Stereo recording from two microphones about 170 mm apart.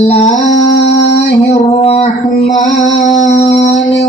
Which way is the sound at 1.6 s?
40° left (ahead or behind).